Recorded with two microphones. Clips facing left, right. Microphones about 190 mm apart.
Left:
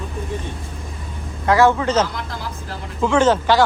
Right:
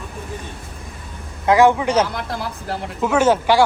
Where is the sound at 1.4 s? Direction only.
15° right (ahead or behind).